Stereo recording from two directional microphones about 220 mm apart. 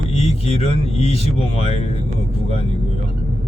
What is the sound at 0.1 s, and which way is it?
Speech, 25° left (ahead or behind).